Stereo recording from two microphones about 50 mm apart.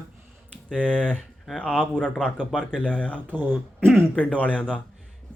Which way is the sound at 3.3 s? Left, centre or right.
Right.